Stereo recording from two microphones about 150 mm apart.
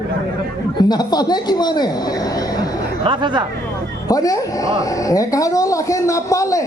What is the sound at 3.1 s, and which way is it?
Speech, 30° right (ahead or behind).